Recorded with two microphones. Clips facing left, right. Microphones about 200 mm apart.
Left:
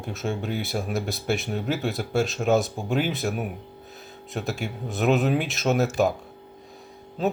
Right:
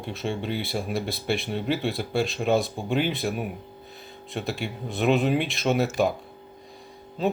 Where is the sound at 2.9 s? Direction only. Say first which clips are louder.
Even; 5° left (ahead or behind).